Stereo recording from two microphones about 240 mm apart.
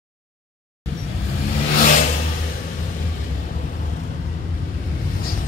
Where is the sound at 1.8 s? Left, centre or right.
Left.